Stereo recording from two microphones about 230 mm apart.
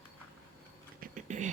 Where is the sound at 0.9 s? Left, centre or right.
Right.